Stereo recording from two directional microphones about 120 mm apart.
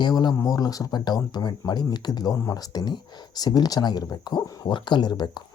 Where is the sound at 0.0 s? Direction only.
35° left (ahead or behind).